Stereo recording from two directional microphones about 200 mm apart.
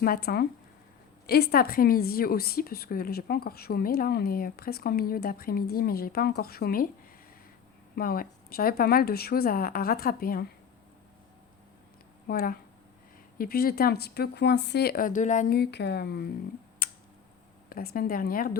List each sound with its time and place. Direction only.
0.0 s a woman's voice: 50° left (ahead or behind)
7.9 s a woman's voice: 45° left (ahead or behind)
12.3 s a woman's voice: 45° left (ahead or behind)
16.8 s a sound: 45° left (ahead or behind)
17.7 s a woman's voice: 45° left (ahead or behind)